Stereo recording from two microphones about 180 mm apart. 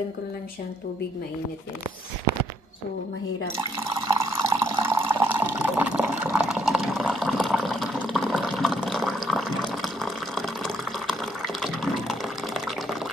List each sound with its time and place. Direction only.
3.5 s water: 15° right (ahead or behind)